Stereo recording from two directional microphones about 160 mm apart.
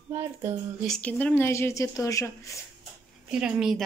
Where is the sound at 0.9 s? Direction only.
5° left (ahead or behind).